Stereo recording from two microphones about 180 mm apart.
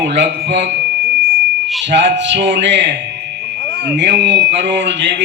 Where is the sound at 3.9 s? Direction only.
70° right (ahead or behind).